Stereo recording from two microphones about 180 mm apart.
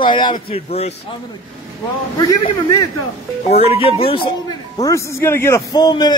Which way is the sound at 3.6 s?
35° left (ahead or behind).